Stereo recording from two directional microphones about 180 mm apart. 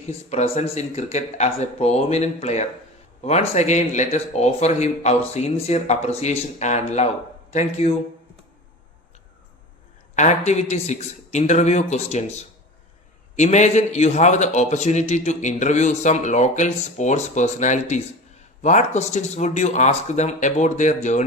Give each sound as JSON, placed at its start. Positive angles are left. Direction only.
{"t": 0.3, "sound": "a man's voice", "side_deg": 35}
{"t": 10.2, "sound": "a man's voice", "side_deg": 40}